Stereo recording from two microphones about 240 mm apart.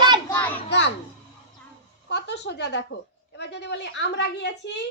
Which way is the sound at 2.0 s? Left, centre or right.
Left.